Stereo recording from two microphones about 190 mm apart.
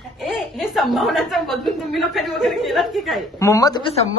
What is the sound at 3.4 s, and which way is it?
Speech, 15° left (ahead or behind).